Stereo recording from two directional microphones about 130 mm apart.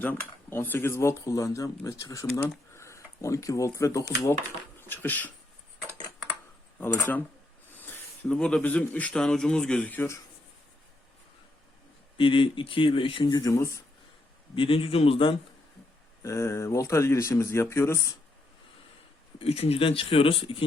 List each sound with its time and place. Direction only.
0.0 s speech: 15° left (ahead or behind)
6.7 s speech: 15° left (ahead or behind)
12.1 s speech: 40° left (ahead or behind)
13.3 s speech: 25° left (ahead or behind)
14.5 s speech: 40° left (ahead or behind)
16.2 s speech: 20° left (ahead or behind)
19.4 s speech: 45° left (ahead or behind)